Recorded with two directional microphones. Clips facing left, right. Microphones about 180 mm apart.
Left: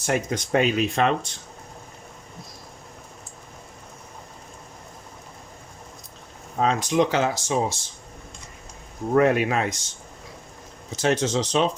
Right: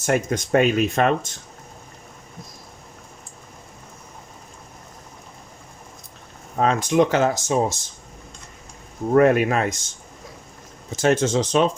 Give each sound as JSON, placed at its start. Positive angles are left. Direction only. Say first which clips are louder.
{"t": 0.0, "sound": "speech", "louder": "right 3 dB", "side_deg": -50}
{"t": 6.6, "sound": "speech", "louder": "right 3 dB", "side_deg": -55}
{"t": 9.1, "sound": "speech", "louder": "right 3 dB", "side_deg": -50}
{"t": 10.9, "sound": "speech", "louder": "right 3 dB", "side_deg": -50}